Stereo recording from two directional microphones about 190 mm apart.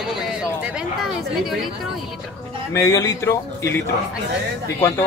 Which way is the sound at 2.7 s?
15° left (ahead or behind).